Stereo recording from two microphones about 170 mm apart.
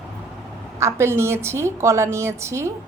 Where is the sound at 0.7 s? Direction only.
15° right (ahead or behind).